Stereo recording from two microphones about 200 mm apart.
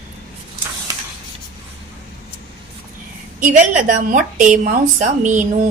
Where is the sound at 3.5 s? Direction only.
40° right (ahead or behind).